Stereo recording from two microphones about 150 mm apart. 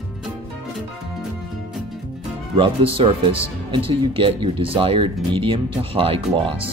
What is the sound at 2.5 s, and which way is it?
Speech, 35° right (ahead or behind).